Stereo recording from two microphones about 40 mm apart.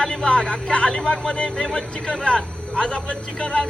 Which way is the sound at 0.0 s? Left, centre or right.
Centre.